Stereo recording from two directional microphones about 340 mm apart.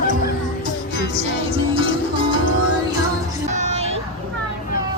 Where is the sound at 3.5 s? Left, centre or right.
Centre.